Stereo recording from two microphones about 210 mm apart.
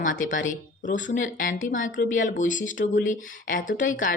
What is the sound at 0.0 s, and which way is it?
Speech, 40° left (ahead or behind).